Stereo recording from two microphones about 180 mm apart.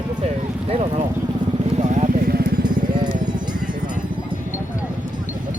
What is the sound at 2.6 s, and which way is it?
Music, 25° right (ahead or behind).